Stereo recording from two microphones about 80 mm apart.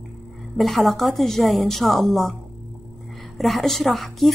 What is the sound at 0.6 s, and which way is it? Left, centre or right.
A woman's voice, centre.